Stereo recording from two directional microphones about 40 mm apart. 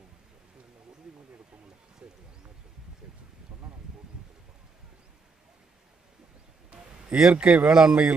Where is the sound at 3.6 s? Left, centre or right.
Centre.